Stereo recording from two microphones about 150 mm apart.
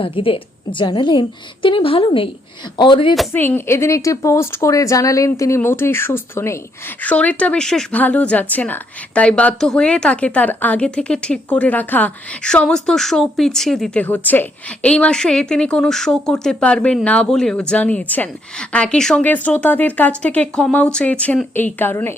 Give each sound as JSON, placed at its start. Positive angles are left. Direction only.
{"t": 0.0, "sound": "a woman's voice", "side_deg": 35}
{"t": 3.3, "sound": "a woman's voice", "side_deg": 15}